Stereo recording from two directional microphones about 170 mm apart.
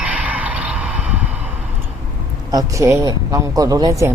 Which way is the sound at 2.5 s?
20° right (ahead or behind).